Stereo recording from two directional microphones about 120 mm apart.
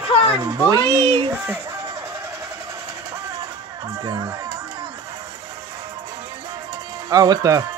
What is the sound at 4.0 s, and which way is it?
Speech, 30° right (ahead or behind).